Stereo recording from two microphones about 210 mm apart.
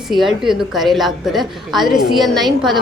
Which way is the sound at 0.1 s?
Centre (ahead or behind).